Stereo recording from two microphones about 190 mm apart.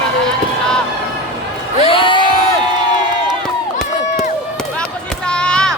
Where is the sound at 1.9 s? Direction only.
25° left (ahead or behind).